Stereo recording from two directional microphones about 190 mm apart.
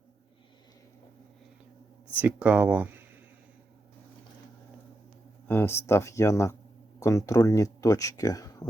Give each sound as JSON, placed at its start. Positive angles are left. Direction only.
{"t": 2.1, "sound": "speech", "side_deg": -5}
{"t": 5.5, "sound": "speech", "side_deg": 10}